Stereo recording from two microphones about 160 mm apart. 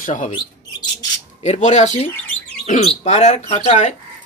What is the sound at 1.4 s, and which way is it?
Speech, 45° left (ahead or behind).